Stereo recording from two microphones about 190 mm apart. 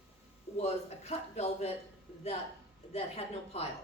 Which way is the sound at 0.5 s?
35° left (ahead or behind).